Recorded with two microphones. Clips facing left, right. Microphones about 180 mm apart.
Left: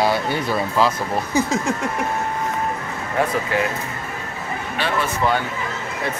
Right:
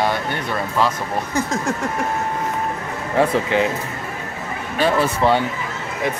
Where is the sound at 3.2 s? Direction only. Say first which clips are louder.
Right 4 dB; 25° right (ahead or behind).